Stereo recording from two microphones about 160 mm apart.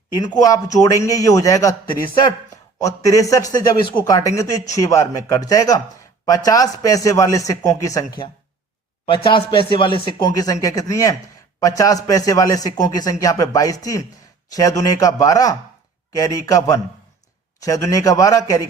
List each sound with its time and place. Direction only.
0.3 s a man's voice: 20° left (ahead or behind)